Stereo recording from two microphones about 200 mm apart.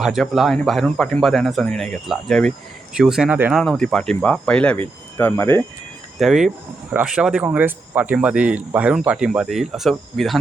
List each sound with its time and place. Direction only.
0.0 s speech: centre (ahead or behind)
3.6 s speech: 5° left (ahead or behind)
6.1 s speech: centre (ahead or behind)